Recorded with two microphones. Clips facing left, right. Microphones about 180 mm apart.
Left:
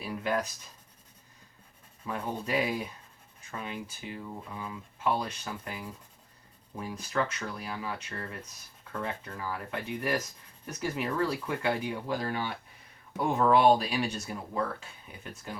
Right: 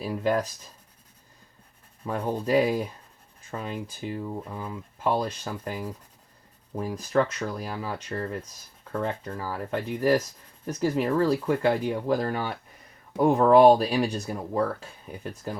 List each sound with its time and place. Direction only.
0.0 s speech: 35° right (ahead or behind)
2.0 s speech: 35° right (ahead or behind)